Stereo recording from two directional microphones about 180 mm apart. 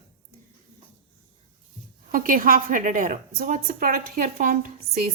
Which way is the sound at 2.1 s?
50° right (ahead or behind).